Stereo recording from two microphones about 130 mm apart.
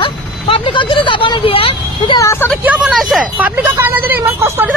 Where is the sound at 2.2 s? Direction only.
20° left (ahead or behind).